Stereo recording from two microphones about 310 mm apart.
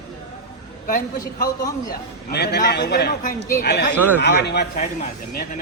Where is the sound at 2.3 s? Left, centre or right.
Left.